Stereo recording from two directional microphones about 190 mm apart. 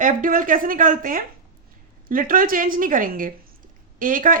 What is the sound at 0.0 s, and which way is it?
A woman's voice, 45° right (ahead or behind).